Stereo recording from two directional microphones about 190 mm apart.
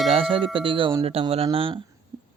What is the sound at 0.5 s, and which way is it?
Speech, 25° right (ahead or behind).